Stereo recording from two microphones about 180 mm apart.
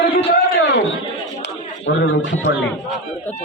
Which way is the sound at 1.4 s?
90° left.